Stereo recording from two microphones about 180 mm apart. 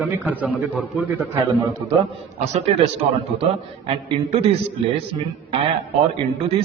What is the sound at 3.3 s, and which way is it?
A man's voice, 35° right (ahead or behind).